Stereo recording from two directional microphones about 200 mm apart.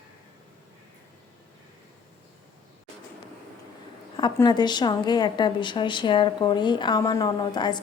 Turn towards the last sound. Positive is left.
turn(degrees=20)  # may be behind; listen again after turning